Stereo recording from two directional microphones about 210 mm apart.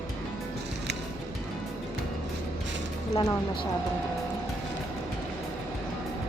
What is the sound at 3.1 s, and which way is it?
Speech, 15° left (ahead or behind).